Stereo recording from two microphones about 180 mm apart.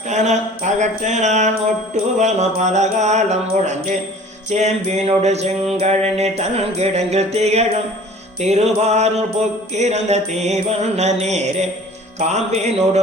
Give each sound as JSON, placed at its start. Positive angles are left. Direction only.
{"t": 0.1, "sound": "mantra", "side_deg": -40}
{"t": 2.1, "sound": "music", "side_deg": -40}